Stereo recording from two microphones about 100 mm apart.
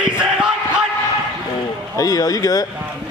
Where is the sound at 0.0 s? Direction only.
10° right (ahead or behind).